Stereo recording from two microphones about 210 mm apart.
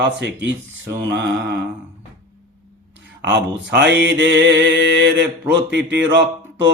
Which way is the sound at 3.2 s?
55° right (ahead or behind).